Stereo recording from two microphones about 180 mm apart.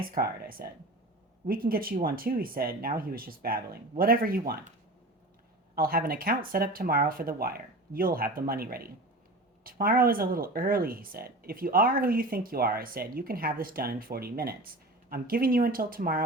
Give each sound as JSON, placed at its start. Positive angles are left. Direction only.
{"t": 0.0, "sound": "speech", "side_deg": -55}
{"t": 5.7, "sound": "speech", "side_deg": -55}